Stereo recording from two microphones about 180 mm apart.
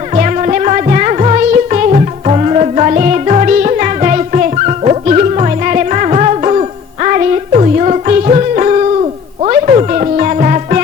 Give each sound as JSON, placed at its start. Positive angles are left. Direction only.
{"t": 0.1, "sound": "music", "side_deg": -40}